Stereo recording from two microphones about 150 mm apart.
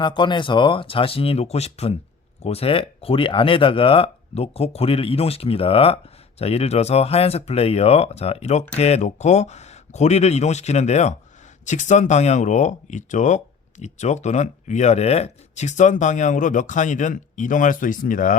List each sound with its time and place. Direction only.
0.0 s speech: 30° left (ahead or behind); by 18.3 s 60° left (ahead or behind)